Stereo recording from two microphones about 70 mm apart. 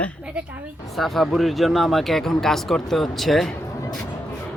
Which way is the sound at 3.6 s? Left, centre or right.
Left.